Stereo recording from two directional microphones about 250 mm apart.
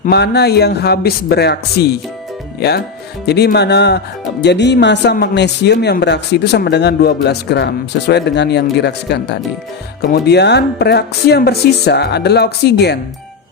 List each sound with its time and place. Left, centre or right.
0.0 s speech: left